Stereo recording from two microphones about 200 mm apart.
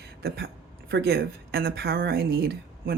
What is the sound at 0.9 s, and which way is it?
A woman's voice, 50° right (ahead or behind).